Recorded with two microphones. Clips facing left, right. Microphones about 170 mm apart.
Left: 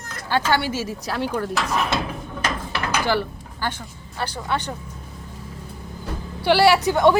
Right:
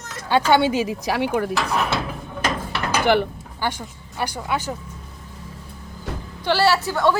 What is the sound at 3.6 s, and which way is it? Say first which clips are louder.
Speech: right 2 dB; 10° right (ahead or behind).